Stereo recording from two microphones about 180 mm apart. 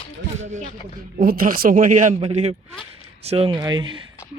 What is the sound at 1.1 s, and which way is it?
A man's voice, 50° right (ahead or behind).